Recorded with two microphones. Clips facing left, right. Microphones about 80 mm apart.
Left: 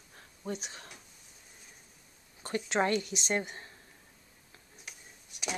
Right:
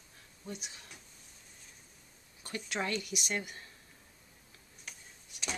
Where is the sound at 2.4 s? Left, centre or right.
Left.